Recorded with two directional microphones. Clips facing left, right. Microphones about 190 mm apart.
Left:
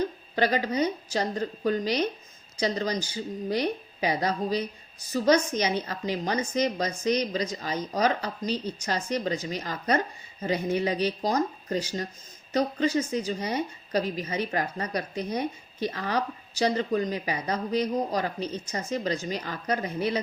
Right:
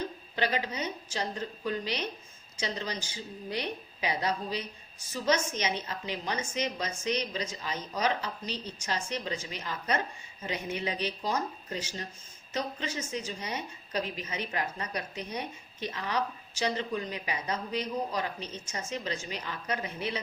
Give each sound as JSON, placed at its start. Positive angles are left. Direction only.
{"t": 0.3, "sound": "a woman's voice", "side_deg": 40}